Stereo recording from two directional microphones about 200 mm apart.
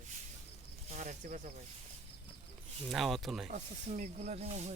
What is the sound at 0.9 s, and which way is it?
Speech, 35° right (ahead or behind).